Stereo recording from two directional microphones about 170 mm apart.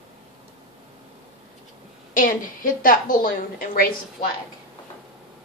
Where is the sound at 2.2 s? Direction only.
55° left (ahead or behind).